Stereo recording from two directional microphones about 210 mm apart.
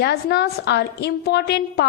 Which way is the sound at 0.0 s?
50° left (ahead or behind).